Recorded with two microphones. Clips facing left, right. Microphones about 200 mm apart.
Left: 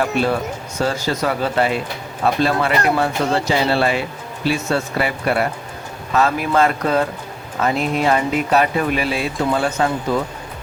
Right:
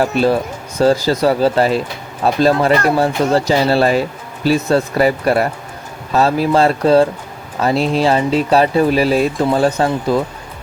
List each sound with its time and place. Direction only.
0.8 s speech: 35° right (ahead or behind)